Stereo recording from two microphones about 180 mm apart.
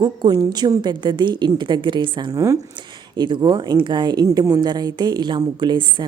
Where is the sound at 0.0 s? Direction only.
25° right (ahead or behind).